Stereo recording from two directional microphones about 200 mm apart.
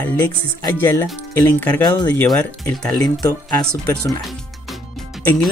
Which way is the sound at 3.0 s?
20° left (ahead or behind).